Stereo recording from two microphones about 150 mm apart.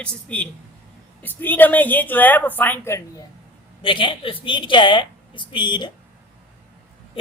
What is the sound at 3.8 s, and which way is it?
A woman's voice, 35° left (ahead or behind).